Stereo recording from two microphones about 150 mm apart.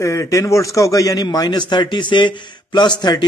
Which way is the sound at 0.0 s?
20° left (ahead or behind).